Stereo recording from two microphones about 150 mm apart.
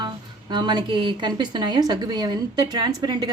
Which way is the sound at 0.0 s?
30° right (ahead or behind).